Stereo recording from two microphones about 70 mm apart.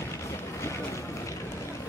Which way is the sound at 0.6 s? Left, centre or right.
Left.